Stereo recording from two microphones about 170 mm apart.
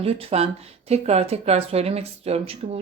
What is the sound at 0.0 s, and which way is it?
Speech, 35° right (ahead or behind).